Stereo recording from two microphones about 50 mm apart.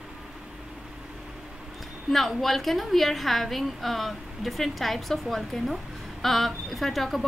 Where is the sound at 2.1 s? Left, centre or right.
Centre.